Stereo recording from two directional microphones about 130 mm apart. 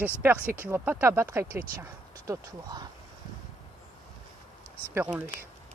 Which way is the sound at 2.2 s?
30° right (ahead or behind).